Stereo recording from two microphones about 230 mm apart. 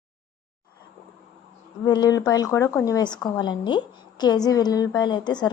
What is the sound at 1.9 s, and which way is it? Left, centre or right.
A woman's voice, centre.